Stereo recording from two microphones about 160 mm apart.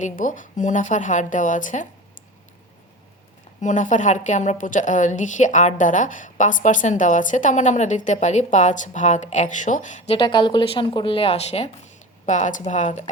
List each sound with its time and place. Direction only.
0.0 s a woman's voice: 55° left (ahead or behind)
3.6 s a woman's voice: 50° left (ahead or behind)
10.2 s a woman's voice: 30° left (ahead or behind); by 13.1 s 50° left (ahead or behind)